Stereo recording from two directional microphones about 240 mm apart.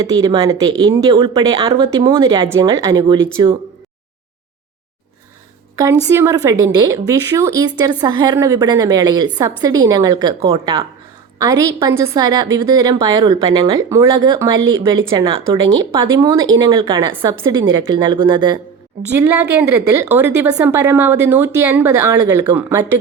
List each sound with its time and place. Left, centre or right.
0.0 s a woman's voice: centre
6.1 s a woman's voice: centre
19.1 s a woman's voice: centre